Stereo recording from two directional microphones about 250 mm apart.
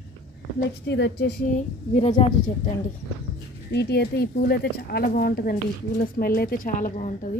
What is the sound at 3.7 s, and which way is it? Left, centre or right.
Speech, left.